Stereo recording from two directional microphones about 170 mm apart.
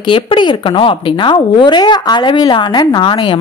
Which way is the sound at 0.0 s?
30° left (ahead or behind).